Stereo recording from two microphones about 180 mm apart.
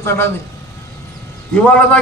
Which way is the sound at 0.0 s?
15° left (ahead or behind).